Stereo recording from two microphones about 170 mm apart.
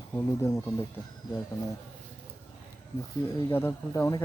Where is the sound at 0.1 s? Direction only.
20° left (ahead or behind).